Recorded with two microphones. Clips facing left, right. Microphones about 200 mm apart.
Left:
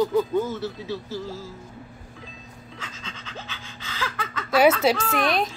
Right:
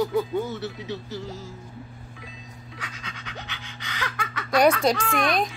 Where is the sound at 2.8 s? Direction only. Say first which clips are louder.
Even; 15° right (ahead or behind).